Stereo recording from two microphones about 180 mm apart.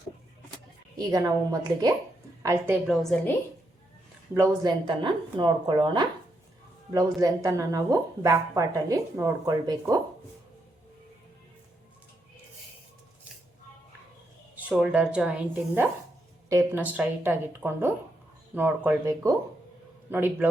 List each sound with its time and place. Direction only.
0.9 s a woman's voice: 20° right (ahead or behind)
2.8 s speech: centre (ahead or behind)
4.4 s speech: 25° right (ahead or behind)
14.7 s speech: 5° right (ahead or behind)